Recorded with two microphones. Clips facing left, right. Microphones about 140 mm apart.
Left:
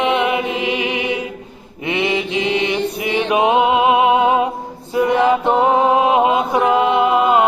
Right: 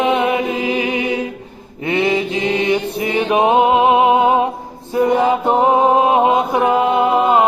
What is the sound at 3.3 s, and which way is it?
Music, 35° right (ahead or behind).